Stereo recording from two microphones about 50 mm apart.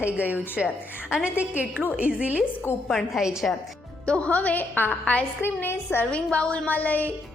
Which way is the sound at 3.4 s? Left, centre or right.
Centre.